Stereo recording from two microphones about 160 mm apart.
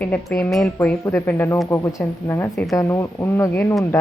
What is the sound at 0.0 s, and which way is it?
Speech, 5° left (ahead or behind).